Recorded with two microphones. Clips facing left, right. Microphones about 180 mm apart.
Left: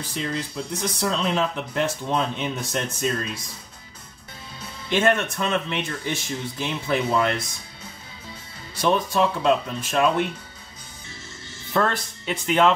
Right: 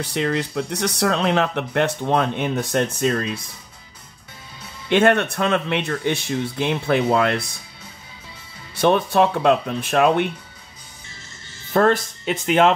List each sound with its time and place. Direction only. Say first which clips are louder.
0.0 s speech: right 6 dB; 70° right (ahead or behind)
4.8 s speech: right 5 dB; 65° right (ahead or behind)
8.8 s speech: right 4 dB; 60° right (ahead or behind)
11.7 s speech: right 6 dB; 45° right (ahead or behind)